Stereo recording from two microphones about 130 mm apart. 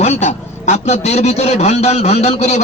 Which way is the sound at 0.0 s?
60° left (ahead or behind).